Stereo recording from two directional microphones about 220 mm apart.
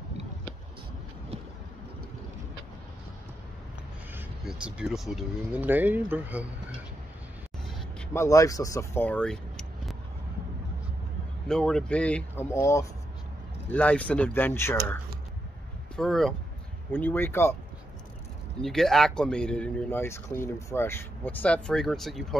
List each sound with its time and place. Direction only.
4.1 s speech: 5° right (ahead or behind)
8.1 s speech: 15° left (ahead or behind)
11.4 s speech: 5° left (ahead or behind)
16.0 s speech: centre (ahead or behind)
18.6 s speech: centre (ahead or behind)